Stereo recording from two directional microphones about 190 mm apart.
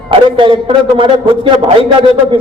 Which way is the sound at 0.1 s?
25° right (ahead or behind).